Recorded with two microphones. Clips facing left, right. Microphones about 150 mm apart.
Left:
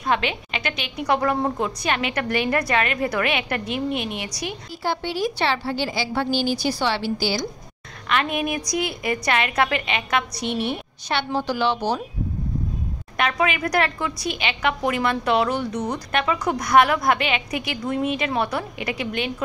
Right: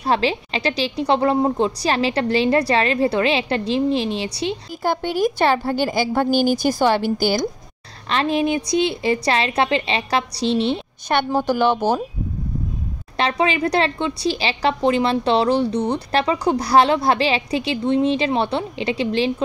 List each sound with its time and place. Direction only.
0.0 s a woman's voice: 35° right (ahead or behind)
4.8 s a woman's voice: 50° right (ahead or behind)
8.1 s a woman's voice: 30° right (ahead or behind)
11.1 s a woman's voice: 50° right (ahead or behind)
13.2 s a woman's voice: 30° right (ahead or behind)